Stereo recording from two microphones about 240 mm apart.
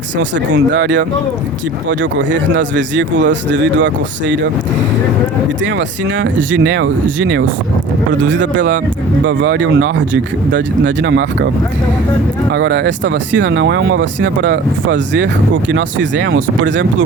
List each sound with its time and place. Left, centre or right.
0.2 s speech: right
5.6 s speech: right
12.5 s speech: right